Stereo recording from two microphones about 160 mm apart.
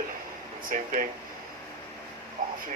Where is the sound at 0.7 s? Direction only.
60° right (ahead or behind).